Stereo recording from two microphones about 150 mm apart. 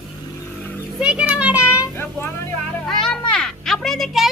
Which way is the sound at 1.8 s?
15° left (ahead or behind).